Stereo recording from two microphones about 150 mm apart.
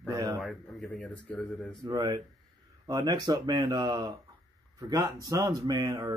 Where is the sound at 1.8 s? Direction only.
25° right (ahead or behind).